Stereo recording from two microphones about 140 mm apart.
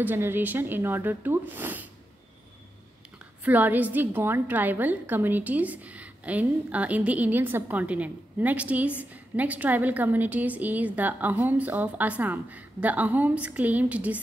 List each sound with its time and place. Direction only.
0.0 s a woman's voice: 15° right (ahead or behind)
3.4 s a woman's voice: 10° right (ahead or behind)